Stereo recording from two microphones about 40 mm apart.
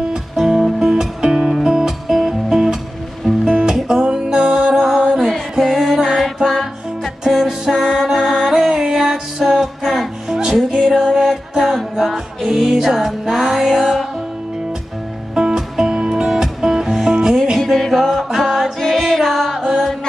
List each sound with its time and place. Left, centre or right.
0.1 s music: centre
6.2 s music: centre
7.2 s music: centre
15.3 s music: centre
18.5 s music: centre